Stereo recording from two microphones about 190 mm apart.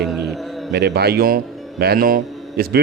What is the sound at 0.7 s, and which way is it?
A man's voice, 60° right (ahead or behind).